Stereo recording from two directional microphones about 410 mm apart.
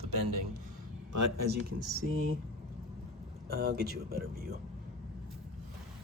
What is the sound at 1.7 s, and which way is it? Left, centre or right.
Speech, right.